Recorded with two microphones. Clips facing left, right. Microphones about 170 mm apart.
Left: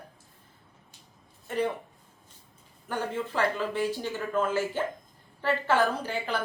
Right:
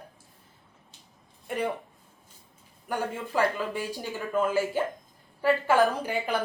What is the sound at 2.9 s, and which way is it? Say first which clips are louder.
A woman's voice: right 1 dB; 10° right (ahead or behind).